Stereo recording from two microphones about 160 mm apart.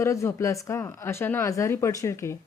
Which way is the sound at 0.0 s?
20° left (ahead or behind).